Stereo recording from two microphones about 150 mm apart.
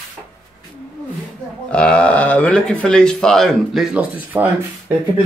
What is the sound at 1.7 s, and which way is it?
Speech, 5° left (ahead or behind).